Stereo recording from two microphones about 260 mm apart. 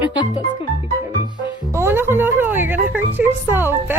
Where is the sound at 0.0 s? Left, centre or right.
Centre.